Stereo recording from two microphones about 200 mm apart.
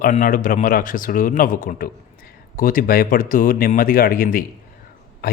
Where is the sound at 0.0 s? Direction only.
40° left (ahead or behind).